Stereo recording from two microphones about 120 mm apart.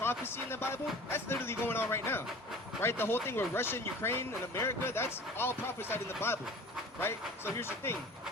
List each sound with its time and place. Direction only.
0.3 s speech: 20° left (ahead or behind)